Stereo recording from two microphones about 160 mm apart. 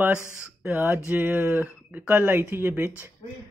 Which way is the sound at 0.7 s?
10° right (ahead or behind).